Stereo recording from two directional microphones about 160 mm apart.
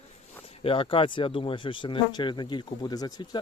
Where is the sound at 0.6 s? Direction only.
35° left (ahead or behind).